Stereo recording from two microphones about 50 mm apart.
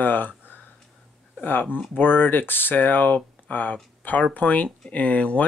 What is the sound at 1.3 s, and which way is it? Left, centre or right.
Speech, left.